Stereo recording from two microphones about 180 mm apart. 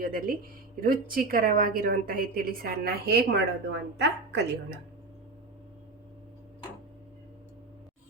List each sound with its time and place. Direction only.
0.0 s a woman's voice: 50° right (ahead or behind)